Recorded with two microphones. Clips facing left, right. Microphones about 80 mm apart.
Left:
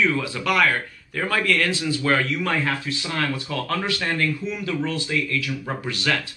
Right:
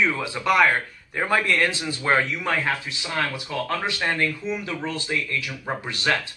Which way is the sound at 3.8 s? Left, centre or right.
Right.